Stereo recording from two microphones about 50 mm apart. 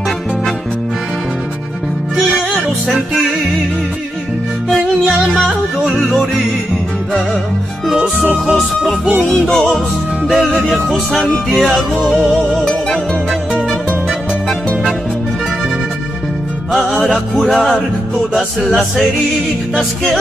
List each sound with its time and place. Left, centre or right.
2.9 s music: centre
4.6 s music: centre
8.0 s music: right
8.5 s music: centre
16.7 s music: centre